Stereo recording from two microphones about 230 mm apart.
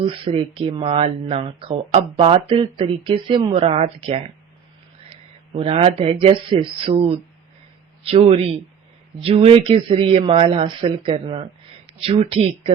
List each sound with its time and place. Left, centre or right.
0.0 s speech: right
5.5 s speech: right